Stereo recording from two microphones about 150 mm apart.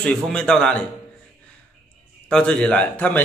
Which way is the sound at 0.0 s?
5° left (ahead or behind).